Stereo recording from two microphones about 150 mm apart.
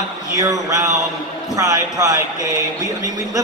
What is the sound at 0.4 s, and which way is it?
A man's voice, 25° right (ahead or behind).